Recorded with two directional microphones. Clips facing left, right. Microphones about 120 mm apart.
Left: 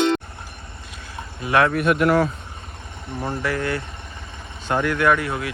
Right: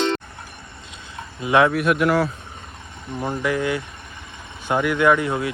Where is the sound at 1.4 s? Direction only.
20° right (ahead or behind).